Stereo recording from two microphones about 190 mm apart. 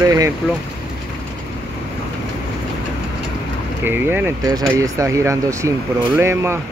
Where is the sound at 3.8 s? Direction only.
10° right (ahead or behind).